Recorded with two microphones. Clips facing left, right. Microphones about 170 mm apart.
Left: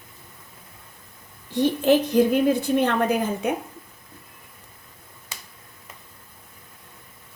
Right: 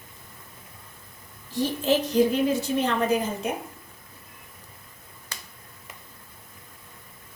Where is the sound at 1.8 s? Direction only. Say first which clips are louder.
Left 2 dB; 55° left (ahead or behind).